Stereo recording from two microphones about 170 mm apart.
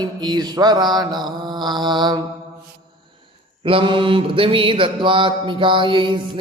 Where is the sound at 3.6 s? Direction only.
30° right (ahead or behind).